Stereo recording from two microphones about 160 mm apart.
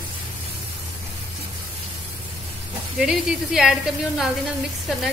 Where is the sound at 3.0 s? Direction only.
5° right (ahead or behind).